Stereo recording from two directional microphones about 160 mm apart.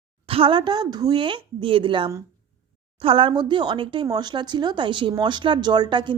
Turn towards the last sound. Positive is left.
turn(degrees=-30)  # may be behind; listen again after turning